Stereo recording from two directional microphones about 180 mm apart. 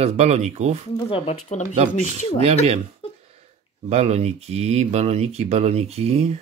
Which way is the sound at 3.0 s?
30° left (ahead or behind).